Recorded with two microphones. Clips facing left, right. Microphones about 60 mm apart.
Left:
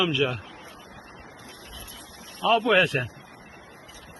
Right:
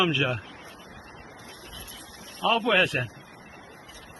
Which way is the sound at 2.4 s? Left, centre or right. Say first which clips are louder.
Left 2 dB; centre.